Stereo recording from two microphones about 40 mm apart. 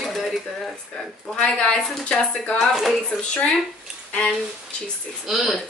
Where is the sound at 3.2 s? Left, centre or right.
Left.